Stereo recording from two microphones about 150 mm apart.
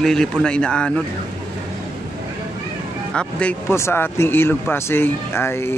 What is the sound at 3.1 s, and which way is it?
A man's voice, 5° left (ahead or behind).